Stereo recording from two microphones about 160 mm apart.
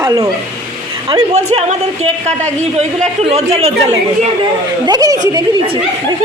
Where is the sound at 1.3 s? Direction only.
45° right (ahead or behind).